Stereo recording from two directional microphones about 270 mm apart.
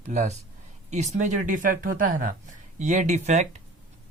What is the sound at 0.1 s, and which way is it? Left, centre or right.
Speech, right.